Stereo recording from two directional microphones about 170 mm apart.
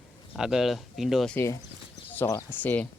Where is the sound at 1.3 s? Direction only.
15° left (ahead or behind).